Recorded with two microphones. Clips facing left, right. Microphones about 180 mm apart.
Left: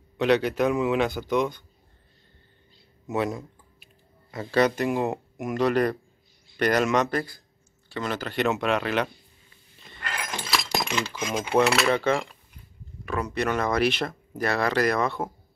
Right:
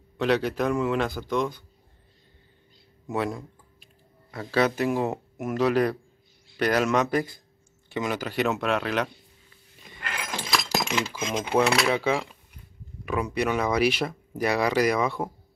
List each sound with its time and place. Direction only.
0.2 s a man's voice: centre (ahead or behind)
3.1 s a man's voice: centre (ahead or behind)
7.1 s a man's voice: 20° right (ahead or behind); by 9.1 s centre (ahead or behind)
9.8 s a sound: 10° right (ahead or behind)
10.5 s keys jangling: centre (ahead or behind)
11.8 s a man's voice: 5° right (ahead or behind)